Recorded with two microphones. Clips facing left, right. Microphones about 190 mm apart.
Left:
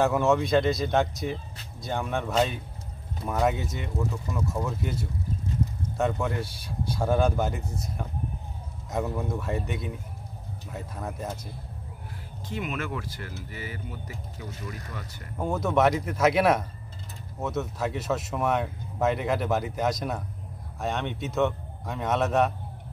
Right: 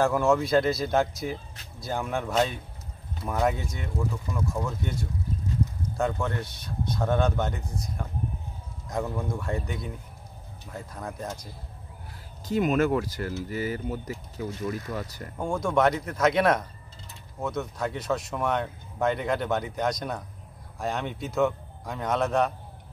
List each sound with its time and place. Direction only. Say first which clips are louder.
0.0 s speech: even; centre (ahead or behind)
8.9 s speech: left 1 dB; 5° left (ahead or behind)
12.4 s speech: right 9 dB; 40° right (ahead or behind)
15.3 s speech: even; 5° left (ahead or behind)